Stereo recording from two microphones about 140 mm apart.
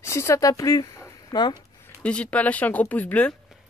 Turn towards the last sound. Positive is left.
turn(degrees=10)  # may be behind; listen again after turning